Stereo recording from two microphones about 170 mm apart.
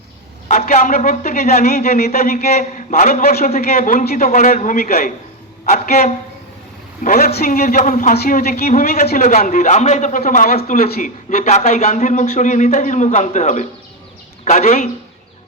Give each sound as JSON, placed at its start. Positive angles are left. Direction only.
{"t": 0.4, "sound": "a man's voice", "side_deg": 50}
{"t": 2.6, "sound": "a man's voice", "side_deg": 45}
{"t": 8.2, "sound": "a man's voice", "side_deg": 60}